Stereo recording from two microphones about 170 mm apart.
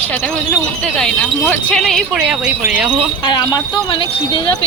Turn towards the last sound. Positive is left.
turn(degrees=25)  # may be behind; listen again after turning